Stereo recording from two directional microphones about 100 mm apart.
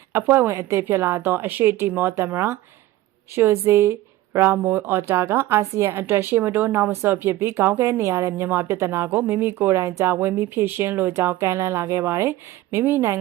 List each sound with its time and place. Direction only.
0.1 s speech: 25° right (ahead or behind)